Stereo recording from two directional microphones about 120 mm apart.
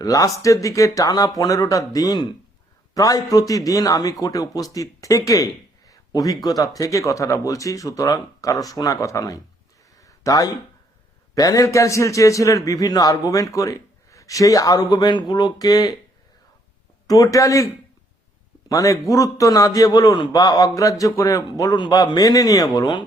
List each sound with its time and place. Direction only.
0.0 s a man's voice: 30° left (ahead or behind)
9.9 s a sound: 30° left (ahead or behind)
11.3 s a man's voice: 30° left (ahead or behind)
17.1 s a man's voice: 30° left (ahead or behind)
18.7 s a man's voice: 30° left (ahead or behind)